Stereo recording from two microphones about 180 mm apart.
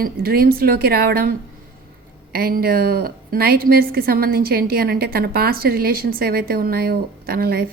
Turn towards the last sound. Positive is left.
turn(degrees=-55)  # may be behind; listen again after turning